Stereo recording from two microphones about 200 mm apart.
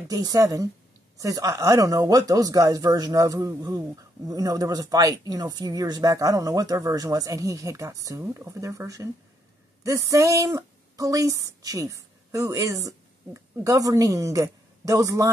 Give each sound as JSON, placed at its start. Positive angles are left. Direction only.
{"t": 0.1, "sound": "a woman's voice", "side_deg": -20}